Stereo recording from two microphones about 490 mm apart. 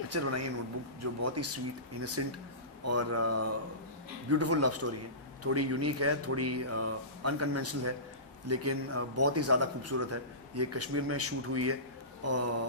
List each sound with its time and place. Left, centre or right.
0.1 s a man's voice: right